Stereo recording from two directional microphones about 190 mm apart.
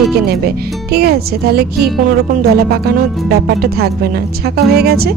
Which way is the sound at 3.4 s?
55° right (ahead or behind).